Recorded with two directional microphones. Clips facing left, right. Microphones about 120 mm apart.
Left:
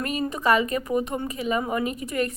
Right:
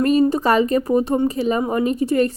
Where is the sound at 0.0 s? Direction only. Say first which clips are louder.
Right 10 dB; 35° right (ahead or behind).